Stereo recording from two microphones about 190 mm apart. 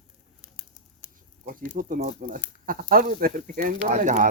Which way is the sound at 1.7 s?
45° right (ahead or behind).